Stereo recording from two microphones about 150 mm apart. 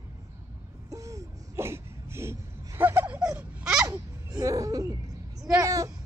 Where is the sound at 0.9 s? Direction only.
20° right (ahead or behind).